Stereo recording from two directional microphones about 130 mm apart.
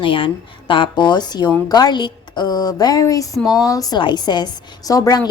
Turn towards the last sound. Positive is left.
turn(degrees=30)  # may be behind; listen again after turning